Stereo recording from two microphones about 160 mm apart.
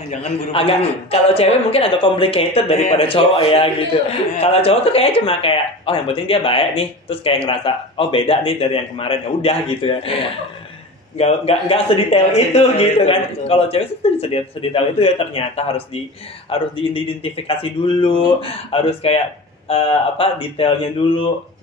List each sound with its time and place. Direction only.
0.1 s speech: 35° left (ahead or behind)
11.1 s speech: 40° left (ahead or behind)